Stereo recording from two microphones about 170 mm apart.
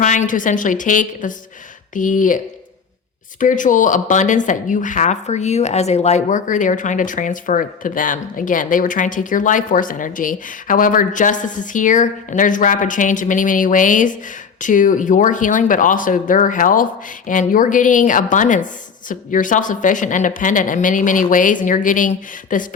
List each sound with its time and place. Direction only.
0.0 s speech: 45° left (ahead or behind)
3.4 s speech: 50° left (ahead or behind)